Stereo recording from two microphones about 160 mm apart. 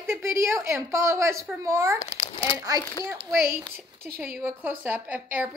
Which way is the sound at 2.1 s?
25° left (ahead or behind).